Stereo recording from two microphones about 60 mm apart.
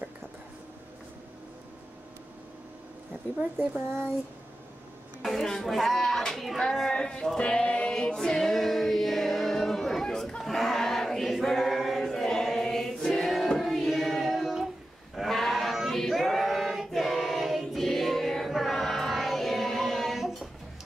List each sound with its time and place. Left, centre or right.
5.2 s a woman's voice: centre
7.3 s male singing: centre
7.9 s music: centre
8.4 s a sound: centre
15.1 s sheep: centre